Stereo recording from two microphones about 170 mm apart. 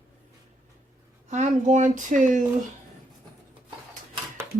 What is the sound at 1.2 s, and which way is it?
Speech, 45° right (ahead or behind).